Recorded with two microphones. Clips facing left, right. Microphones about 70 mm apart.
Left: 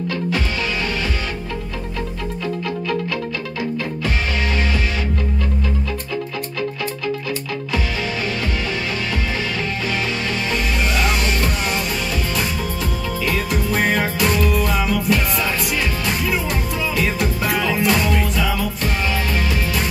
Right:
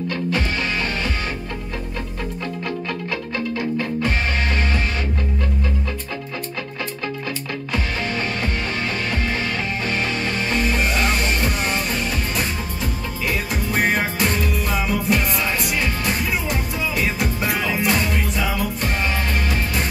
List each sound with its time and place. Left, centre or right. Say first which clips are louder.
13.2 s music: left 2 dB; right
16.3 s music: left 2 dB; right